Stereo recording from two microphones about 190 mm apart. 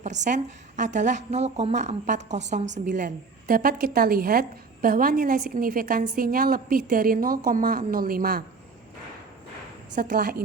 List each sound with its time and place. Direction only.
0.0 s a woman's voice: 40° right (ahead or behind)
9.9 s a woman's voice: 50° right (ahead or behind)